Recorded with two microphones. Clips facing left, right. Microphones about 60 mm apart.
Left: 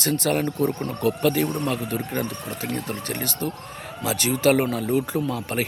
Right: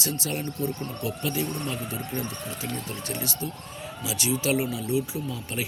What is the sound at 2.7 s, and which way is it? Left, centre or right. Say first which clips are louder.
Speech: left 4 dB; left.